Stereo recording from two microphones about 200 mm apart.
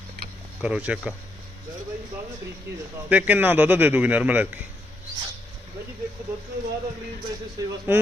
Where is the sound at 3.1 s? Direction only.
10° right (ahead or behind).